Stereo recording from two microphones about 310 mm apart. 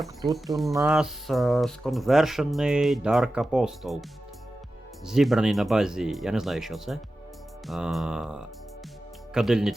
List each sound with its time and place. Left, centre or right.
0.3 s speech: centre
5.0 s speech: centre